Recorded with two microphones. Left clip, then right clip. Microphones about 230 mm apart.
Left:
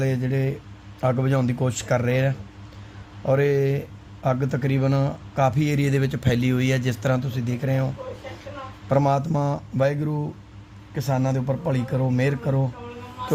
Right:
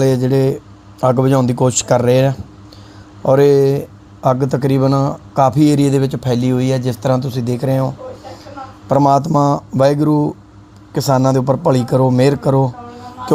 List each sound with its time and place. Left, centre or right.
0.0 s a man's voice: right